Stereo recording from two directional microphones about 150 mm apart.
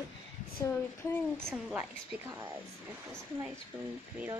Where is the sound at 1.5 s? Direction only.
5° right (ahead or behind).